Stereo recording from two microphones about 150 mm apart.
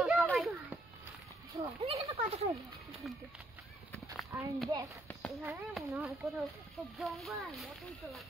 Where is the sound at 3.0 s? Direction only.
Centre (ahead or behind).